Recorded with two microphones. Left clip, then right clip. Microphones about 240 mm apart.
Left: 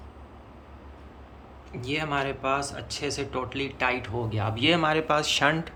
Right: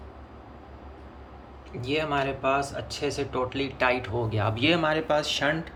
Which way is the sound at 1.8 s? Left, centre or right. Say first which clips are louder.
Right 2 dB; centre.